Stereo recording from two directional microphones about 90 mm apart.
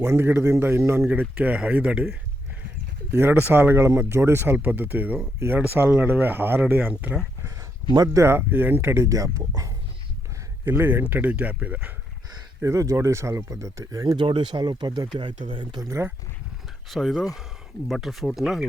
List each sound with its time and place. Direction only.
0.0 s speech: 30° right (ahead or behind)
1.0 s speech: 15° right (ahead or behind)
3.2 s speech: 25° right (ahead or behind)
7.9 s speech: 45° right (ahead or behind)
10.7 s speech: 25° right (ahead or behind)
12.6 s speech: 35° right (ahead or behind)
14.2 s speech: 65° right (ahead or behind)
15.2 s speech: 65° right (ahead or behind)
15.8 s speech: 35° right (ahead or behind)
16.9 s speech: centre (ahead or behind)